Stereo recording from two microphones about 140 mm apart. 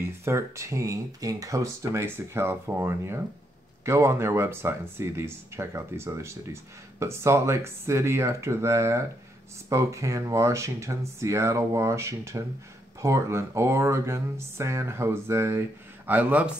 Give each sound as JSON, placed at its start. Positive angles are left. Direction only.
{"t": 0.2, "sound": "speech", "side_deg": -20}